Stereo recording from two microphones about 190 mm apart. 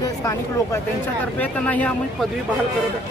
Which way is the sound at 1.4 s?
10° left (ahead or behind).